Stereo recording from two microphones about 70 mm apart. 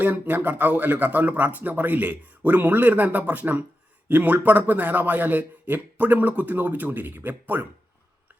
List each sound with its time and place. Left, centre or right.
0.0 s speech: right